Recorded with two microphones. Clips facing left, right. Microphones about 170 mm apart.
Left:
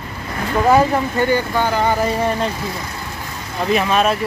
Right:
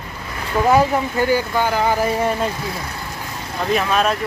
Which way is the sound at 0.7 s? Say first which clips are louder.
Left 1 dB; 5° right (ahead or behind).